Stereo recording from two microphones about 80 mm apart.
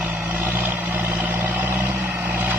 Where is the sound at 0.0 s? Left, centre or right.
Centre.